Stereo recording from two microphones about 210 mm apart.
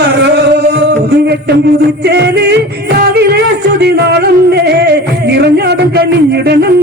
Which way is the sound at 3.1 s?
50° right (ahead or behind).